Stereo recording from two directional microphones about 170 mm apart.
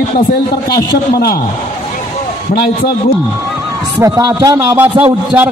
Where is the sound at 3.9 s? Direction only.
20° right (ahead or behind).